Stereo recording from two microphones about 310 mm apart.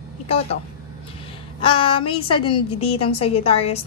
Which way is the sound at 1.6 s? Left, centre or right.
Centre.